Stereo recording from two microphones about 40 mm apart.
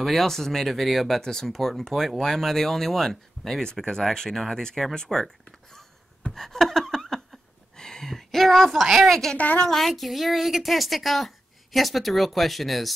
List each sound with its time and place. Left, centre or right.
0.0 s a woman's voice: centre
1.2 s speech: centre
6.3 s a sound: centre
9.1 s a woman's voice: centre